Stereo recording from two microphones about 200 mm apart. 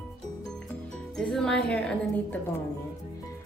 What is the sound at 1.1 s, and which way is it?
Speech, 5° left (ahead or behind).